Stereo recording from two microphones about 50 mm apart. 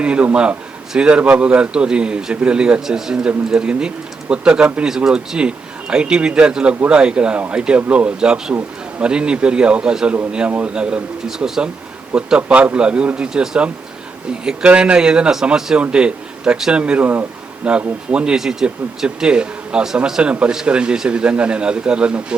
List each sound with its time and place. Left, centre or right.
0.0 s a man's voice: right
14.7 s a man's voice: right
16.7 s a man's voice: right
17.0 s speech: right
17.7 s a man's voice: right